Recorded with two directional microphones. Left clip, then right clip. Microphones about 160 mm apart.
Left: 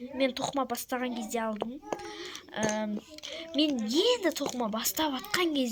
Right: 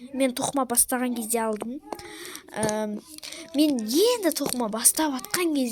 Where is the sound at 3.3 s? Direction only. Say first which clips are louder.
Right 5 dB; 35° right (ahead or behind).